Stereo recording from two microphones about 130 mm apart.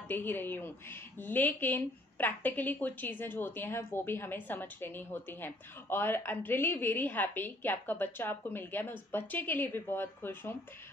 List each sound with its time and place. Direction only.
0.1 s a woman's voice: 15° left (ahead or behind)